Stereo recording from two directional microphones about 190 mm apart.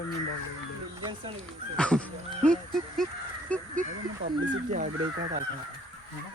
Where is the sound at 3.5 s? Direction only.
5° left (ahead or behind).